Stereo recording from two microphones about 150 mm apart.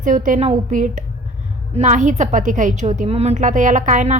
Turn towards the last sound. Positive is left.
turn(degrees=-55)  # may be behind; listen again after turning